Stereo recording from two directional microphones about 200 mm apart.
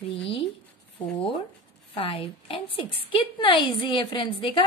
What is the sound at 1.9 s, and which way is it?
A woman's voice, 25° left (ahead or behind).